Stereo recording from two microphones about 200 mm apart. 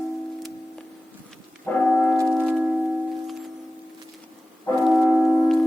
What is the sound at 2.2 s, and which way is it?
Music, centre (ahead or behind).